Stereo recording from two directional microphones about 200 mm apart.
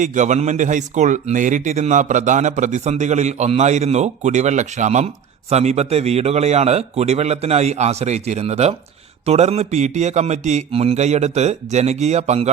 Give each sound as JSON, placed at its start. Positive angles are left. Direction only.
{"t": 0.0, "sound": "a man's voice", "side_deg": -35}